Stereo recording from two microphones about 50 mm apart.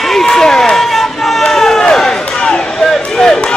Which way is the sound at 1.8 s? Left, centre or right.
Centre.